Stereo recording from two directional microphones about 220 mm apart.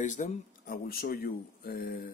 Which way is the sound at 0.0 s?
35° left (ahead or behind).